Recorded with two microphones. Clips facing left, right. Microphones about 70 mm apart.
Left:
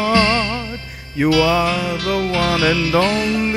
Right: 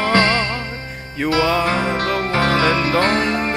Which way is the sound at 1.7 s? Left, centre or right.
Right.